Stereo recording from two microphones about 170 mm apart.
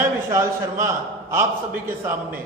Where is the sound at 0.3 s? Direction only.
15° right (ahead or behind).